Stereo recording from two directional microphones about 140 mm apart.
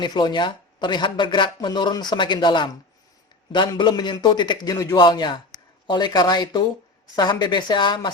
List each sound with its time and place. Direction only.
0.0 s speech: 30° left (ahead or behind)